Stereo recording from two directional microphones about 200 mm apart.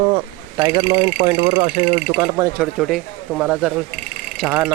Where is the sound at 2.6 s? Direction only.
Centre (ahead or behind).